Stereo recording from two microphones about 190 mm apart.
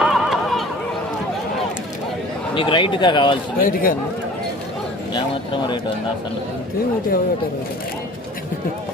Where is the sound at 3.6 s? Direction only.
50° left (ahead or behind).